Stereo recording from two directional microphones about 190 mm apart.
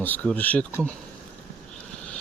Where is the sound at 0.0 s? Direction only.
10° left (ahead or behind).